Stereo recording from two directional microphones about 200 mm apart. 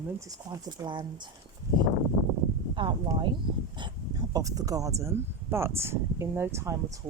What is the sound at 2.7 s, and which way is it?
Speech, 25° right (ahead or behind).